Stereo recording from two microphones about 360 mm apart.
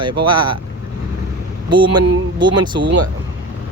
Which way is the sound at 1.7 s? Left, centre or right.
Centre.